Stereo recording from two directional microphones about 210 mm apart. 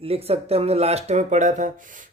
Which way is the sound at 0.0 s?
30° right (ahead or behind).